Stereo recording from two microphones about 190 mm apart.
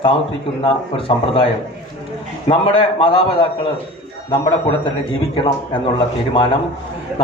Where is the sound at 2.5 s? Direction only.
25° left (ahead or behind).